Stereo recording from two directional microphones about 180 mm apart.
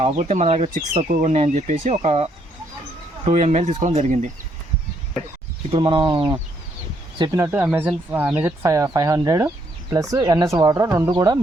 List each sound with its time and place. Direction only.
0.0 s speech: 35° right (ahead or behind)
5.7 s speech: 25° right (ahead or behind)